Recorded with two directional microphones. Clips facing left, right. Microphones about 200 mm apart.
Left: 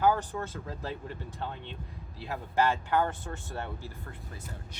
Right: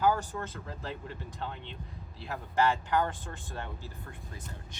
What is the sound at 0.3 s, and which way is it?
Speech, 15° left (ahead or behind).